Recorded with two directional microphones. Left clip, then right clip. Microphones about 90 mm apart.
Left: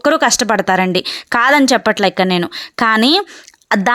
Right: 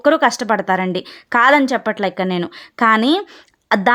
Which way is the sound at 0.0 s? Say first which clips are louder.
Left 1 dB; 30° left (ahead or behind).